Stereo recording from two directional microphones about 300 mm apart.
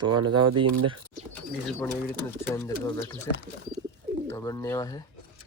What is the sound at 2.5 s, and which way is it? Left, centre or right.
Speech, centre.